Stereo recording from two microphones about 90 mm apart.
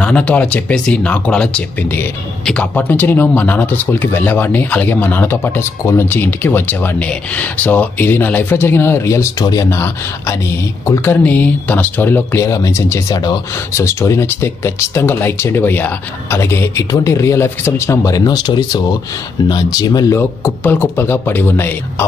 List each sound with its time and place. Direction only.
0.0 s speech: 15° left (ahead or behind)
10.9 s speech: 20° left (ahead or behind)
13.1 s speech: 50° left (ahead or behind)
13.7 s speech: 30° left (ahead or behind); by 20.1 s 50° left (ahead or behind)
20.1 s speech: 30° left (ahead or behind)